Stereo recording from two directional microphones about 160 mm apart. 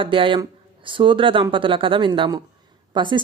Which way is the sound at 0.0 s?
30° right (ahead or behind).